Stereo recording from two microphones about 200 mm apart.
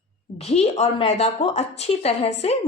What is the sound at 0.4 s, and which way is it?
A woman's voice, 30° left (ahead or behind).